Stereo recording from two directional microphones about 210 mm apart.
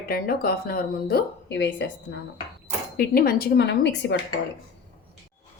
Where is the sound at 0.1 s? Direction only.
45° left (ahead or behind).